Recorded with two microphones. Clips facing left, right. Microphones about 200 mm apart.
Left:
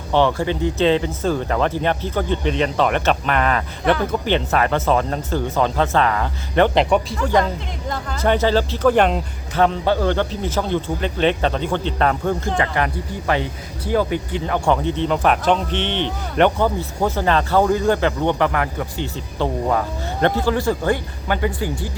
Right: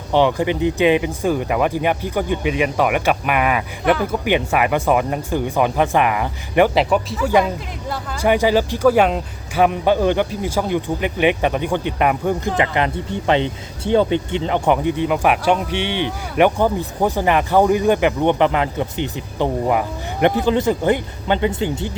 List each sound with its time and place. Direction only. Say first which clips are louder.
0.1 s speech: right 1 dB; 15° right (ahead or behind)
6.7 s speech: even; 5° right (ahead or behind); by 21.9 s 25° right (ahead or behind)